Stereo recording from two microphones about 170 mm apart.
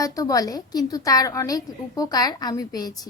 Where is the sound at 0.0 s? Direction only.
20° left (ahead or behind).